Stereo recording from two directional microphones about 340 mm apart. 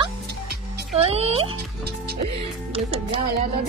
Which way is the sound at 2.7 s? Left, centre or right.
Centre.